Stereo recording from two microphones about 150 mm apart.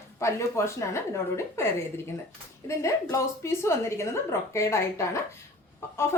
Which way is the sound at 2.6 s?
20° left (ahead or behind).